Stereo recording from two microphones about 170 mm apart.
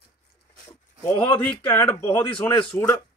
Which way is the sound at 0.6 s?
10° left (ahead or behind).